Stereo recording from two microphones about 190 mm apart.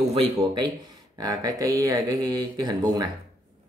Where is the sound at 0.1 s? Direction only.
25° right (ahead or behind).